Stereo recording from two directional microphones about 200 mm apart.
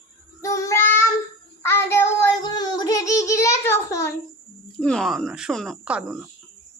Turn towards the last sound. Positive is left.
turn(degrees=-5)  # may be behind; listen again after turning